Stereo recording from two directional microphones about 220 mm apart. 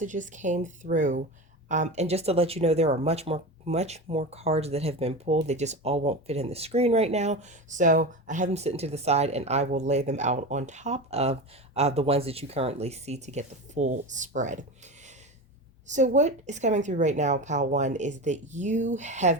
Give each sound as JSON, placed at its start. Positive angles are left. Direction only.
{"t": 0.0, "sound": "a woman's voice", "side_deg": -35}
{"t": 15.9, "sound": "a woman's voice", "side_deg": -35}